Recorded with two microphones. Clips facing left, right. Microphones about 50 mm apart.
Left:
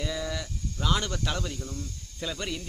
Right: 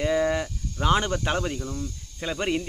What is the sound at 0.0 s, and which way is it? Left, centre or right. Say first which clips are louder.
Speech: right 10 dB; right.